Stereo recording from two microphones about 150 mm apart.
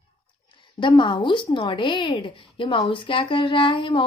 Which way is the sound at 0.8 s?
30° left (ahead or behind).